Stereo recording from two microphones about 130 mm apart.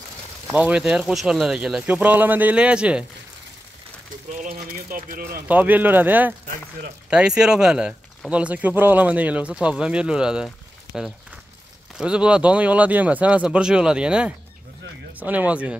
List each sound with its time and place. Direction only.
0.5 s speech: 10° right (ahead or behind)
4.3 s a sound: 80° right
5.5 s speech: 15° right (ahead or behind)